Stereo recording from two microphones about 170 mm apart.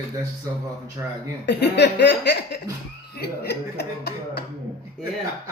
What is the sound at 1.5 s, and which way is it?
Speech, 85° left.